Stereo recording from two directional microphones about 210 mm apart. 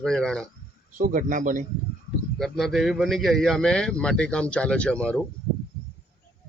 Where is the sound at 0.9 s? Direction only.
40° right (ahead or behind).